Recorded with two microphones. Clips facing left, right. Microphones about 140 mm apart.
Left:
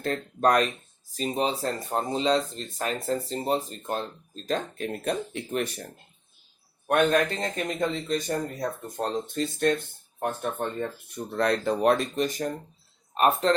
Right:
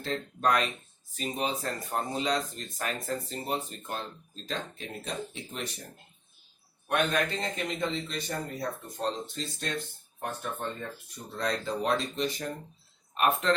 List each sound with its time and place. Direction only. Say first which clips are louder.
0.0 s a man's voice: left 5 dB; 50° left (ahead or behind)
4.4 s speech: left 8 dB; 50° left (ahead or behind)
6.8 s a man's voice: left 6 dB; 50° left (ahead or behind)
9.0 s speech: left 6 dB; 55° left (ahead or behind)
13.1 s speech: left 5 dB; 35° left (ahead or behind)